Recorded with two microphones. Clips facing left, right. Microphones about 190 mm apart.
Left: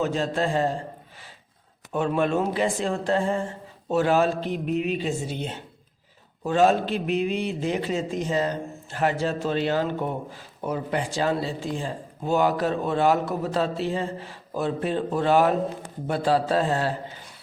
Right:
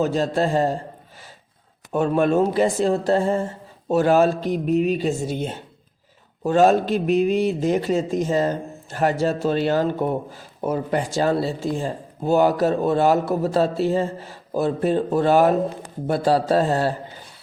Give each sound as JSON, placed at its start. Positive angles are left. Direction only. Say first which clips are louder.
{"t": 0.0, "sound": "speech", "louder": "right 4 dB", "side_deg": -40}
{"t": 1.9, "sound": "a man's voice", "louder": "right 5 dB", "side_deg": -45}